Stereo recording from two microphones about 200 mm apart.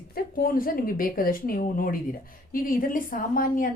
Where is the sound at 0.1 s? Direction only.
45° left (ahead or behind).